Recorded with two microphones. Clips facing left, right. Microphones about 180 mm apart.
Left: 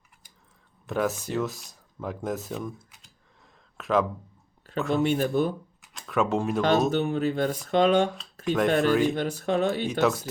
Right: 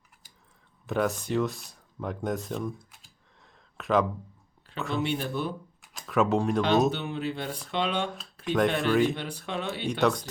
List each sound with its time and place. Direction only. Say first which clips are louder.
0.9 s speech: even; centre (ahead or behind)
5.0 s speech: left 6 dB; 45° left (ahead or behind)
5.8 s speech: right 1 dB; centre (ahead or behind)
6.9 s speech: left 7 dB; 45° left (ahead or behind)
8.4 s speech: left 3 dB; centre (ahead or behind)
9.1 s speech: left 8 dB; 45° left (ahead or behind)
10.0 s speech: left 1 dB; 5° left (ahead or behind)